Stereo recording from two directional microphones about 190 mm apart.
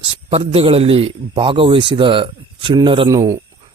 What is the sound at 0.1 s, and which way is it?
A man's voice, 30° right (ahead or behind).